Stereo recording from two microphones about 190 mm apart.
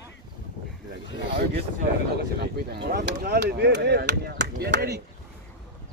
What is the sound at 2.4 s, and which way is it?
Speech, 55° right (ahead or behind).